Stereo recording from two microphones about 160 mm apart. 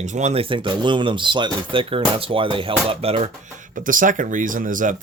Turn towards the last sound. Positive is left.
turn(degrees=-55)  # may be behind; listen again after turning